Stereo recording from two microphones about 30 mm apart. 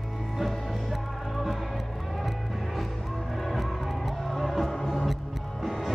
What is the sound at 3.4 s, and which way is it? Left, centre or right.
Music, centre.